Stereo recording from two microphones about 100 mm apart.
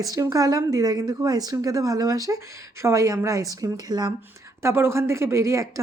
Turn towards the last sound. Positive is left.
turn(degrees=-30)  # may be behind; listen again after turning